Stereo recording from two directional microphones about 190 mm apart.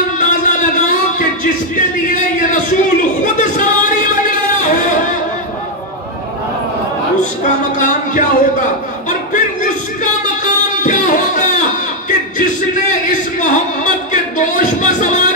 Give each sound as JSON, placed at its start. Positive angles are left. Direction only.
{"t": 0.2, "sound": "music", "side_deg": 40}
{"t": 7.8, "sound": "a sound", "side_deg": 40}
{"t": 10.4, "sound": "music", "side_deg": 40}